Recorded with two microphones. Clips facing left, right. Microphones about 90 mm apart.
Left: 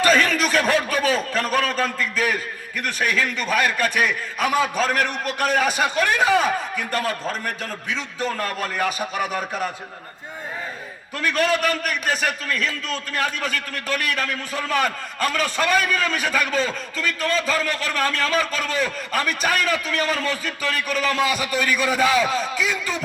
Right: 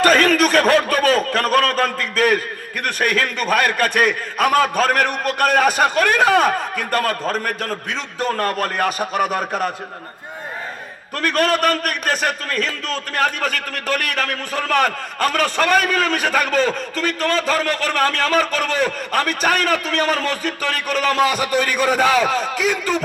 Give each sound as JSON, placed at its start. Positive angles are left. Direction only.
{"t": 0.0, "sound": "speech", "side_deg": -55}
{"t": 11.2, "sound": "a man's voice", "side_deg": -55}
{"t": 22.3, "sound": "a man's voice", "side_deg": -55}